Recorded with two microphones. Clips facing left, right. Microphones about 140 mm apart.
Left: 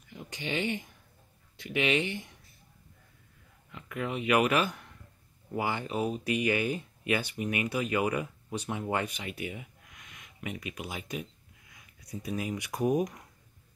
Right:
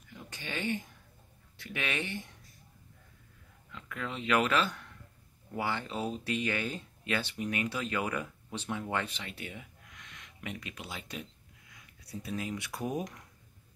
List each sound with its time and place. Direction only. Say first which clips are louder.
0.1 s speech: left 6 dB; 20° left (ahead or behind)
3.7 s speech: left 5 dB; 15° left (ahead or behind)